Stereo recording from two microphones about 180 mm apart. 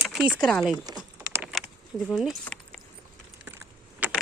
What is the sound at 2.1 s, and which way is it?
Speech, centre (ahead or behind).